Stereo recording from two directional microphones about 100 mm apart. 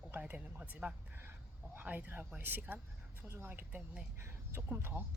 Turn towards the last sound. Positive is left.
turn(degrees=-20)  # may be behind; listen again after turning